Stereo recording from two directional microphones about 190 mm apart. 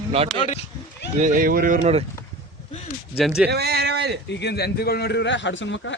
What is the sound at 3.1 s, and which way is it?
Speech, 5° right (ahead or behind).